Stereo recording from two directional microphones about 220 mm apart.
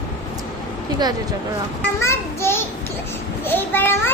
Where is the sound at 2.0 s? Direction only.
10° left (ahead or behind).